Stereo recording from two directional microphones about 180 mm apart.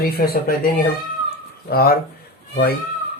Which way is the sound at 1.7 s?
60° left (ahead or behind).